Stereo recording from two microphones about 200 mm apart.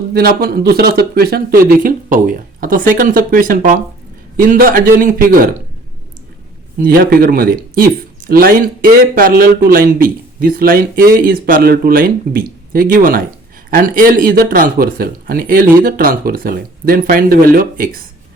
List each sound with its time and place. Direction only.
0.1 s speech: 50° right (ahead or behind)
6.8 s speech: 45° right (ahead or behind)